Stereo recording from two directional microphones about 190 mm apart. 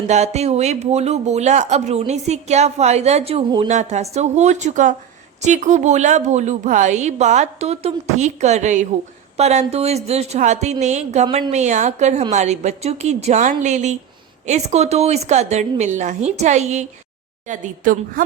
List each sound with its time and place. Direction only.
0.1 s a woman's voice: 35° right (ahead or behind)